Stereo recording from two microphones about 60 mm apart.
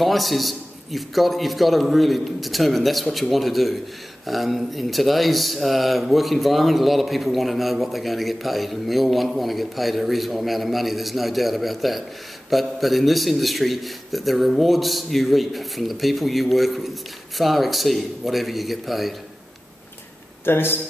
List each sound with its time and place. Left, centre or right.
0.0 s a man's voice: centre
20.4 s speech: left